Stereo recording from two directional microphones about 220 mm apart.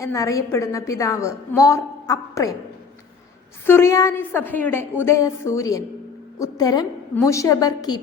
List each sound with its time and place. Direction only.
0.0 s a woman's voice: 15° left (ahead or behind)
3.7 s a woman's voice: 10° left (ahead or behind)